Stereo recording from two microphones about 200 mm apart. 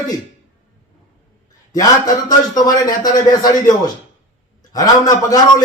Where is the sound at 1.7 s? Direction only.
20° left (ahead or behind).